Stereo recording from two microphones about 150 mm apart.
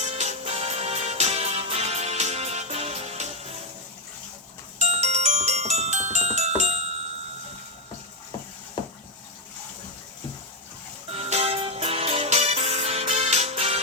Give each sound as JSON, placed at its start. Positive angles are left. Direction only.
{"t": 0.0, "sound": "music", "side_deg": -45}
{"t": 4.8, "sound": "music", "side_deg": -50}
{"t": 11.1, "sound": "music", "side_deg": -40}